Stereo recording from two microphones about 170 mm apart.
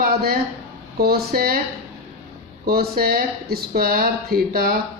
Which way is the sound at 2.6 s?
65° right (ahead or behind).